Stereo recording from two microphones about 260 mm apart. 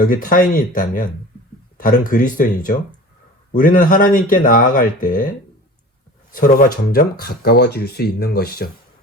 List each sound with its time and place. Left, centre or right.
0.0 s speech: left
6.3 s speech: left